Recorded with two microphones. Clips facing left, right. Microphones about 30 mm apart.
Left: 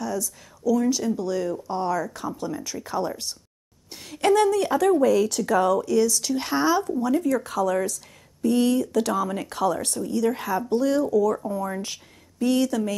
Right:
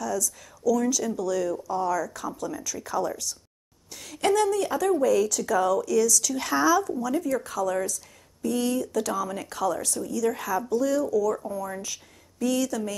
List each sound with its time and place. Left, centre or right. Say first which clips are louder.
0.0 s speech: even; left
1.7 s speech: left 1 dB; left
3.3 s speech: left 1 dB; left
3.9 s speech: left 2 dB; left
4.3 s speech: left 4 dB; left
5.8 s speech: left 1 dB; left
9.3 s speech: left 3 dB; left
10.7 s speech: left 3 dB; left